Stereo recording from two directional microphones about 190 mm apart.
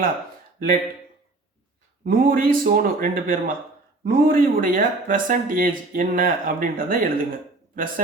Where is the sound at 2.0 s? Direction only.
50° right (ahead or behind).